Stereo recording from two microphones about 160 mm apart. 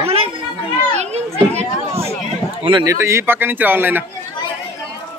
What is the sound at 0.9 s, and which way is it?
Children playing, 45° right (ahead or behind).